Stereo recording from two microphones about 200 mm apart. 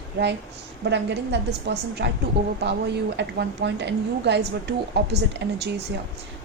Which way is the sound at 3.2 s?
60° right (ahead or behind).